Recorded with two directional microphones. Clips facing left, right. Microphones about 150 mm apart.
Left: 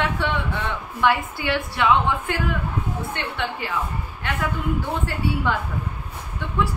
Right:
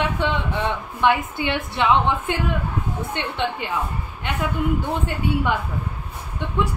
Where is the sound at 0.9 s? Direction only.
20° right (ahead or behind).